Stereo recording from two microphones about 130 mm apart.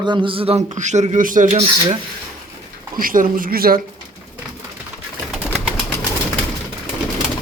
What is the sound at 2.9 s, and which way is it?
Speech, 90° right.